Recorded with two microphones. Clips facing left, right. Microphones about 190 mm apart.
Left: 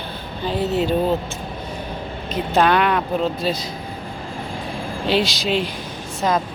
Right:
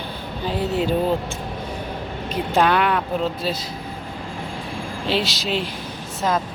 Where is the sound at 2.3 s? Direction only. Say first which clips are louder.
Left 2 dB; 5° right (ahead or behind).